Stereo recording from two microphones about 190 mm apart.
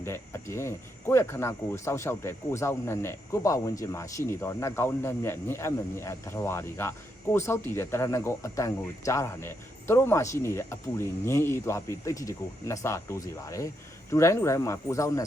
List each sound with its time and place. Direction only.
0.0 s speech: 15° left (ahead or behind)